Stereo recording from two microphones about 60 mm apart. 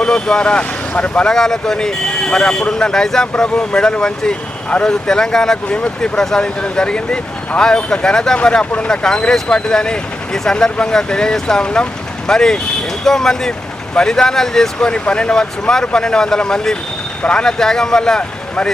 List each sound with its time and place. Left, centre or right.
0.0 s speech: centre